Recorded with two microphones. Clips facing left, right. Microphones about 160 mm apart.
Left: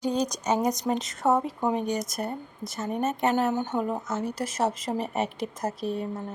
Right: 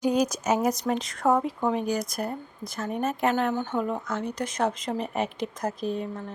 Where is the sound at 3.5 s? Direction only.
15° left (ahead or behind).